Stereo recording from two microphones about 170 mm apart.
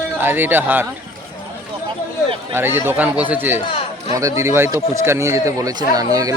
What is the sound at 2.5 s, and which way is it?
Speech, 15° right (ahead or behind).